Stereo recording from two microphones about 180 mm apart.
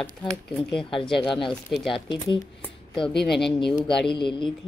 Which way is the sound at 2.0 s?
25° left (ahead or behind).